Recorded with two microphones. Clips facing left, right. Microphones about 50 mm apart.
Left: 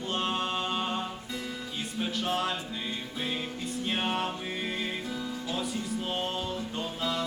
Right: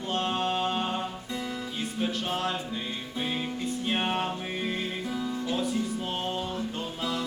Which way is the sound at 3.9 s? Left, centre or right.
Centre.